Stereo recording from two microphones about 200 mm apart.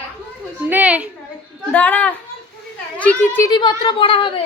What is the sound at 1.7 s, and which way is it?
A child's voice, 10° left (ahead or behind).